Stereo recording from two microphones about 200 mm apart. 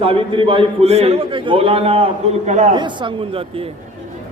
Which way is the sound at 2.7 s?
25° right (ahead or behind).